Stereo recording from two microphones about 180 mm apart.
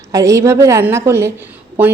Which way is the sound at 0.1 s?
15° right (ahead or behind).